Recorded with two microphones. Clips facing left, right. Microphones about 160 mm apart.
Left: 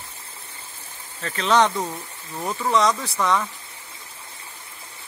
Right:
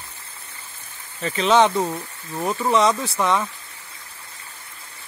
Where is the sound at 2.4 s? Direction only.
10° right (ahead or behind).